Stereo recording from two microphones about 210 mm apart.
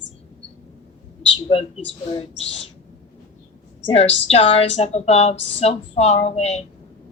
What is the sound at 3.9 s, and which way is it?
A woman's voice, 30° left (ahead or behind).